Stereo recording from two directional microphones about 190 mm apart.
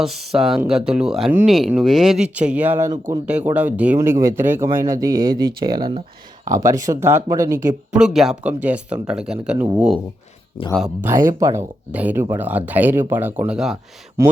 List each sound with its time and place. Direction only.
0.0 s speech: centre (ahead or behind); by 5.3 s 20° right (ahead or behind)
5.6 s speech: 50° right (ahead or behind)
6.5 s speech: 15° right (ahead or behind)
7.9 s speech: 5° right (ahead or behind)
11.3 s speech: 15° right (ahead or behind)